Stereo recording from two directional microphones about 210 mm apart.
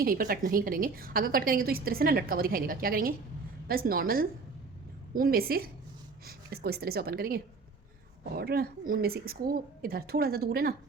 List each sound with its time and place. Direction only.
0.0 s a woman's voice: 45° right (ahead or behind)